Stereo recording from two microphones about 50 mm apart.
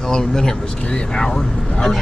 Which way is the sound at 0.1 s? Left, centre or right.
Centre.